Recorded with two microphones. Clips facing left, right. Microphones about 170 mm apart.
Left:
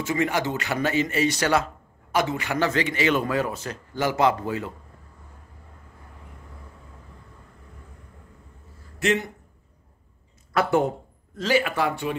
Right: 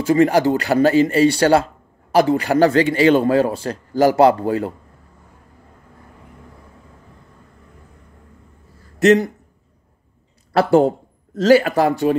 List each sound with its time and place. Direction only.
0.0 s a man's voice: 35° right (ahead or behind)
9.0 s a man's voice: 40° right (ahead or behind)
10.5 s a man's voice: 35° right (ahead or behind)